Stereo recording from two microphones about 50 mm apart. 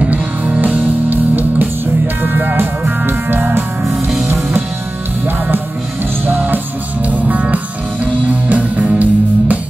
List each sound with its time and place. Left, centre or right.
0.0 s music: right
3.8 s music: centre
6.2 s music: right
7.2 s music: right